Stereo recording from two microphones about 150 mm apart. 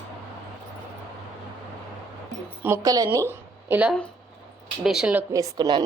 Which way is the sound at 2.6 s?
20° right (ahead or behind).